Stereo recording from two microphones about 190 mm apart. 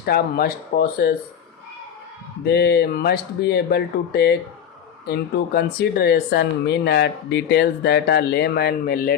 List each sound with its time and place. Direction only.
0.0 s speech: 55° left (ahead or behind)
2.4 s speech: 55° left (ahead or behind)